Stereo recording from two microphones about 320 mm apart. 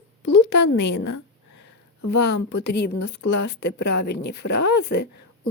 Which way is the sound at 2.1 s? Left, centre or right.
Left.